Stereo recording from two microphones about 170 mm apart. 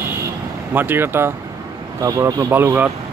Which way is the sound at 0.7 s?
10° right (ahead or behind).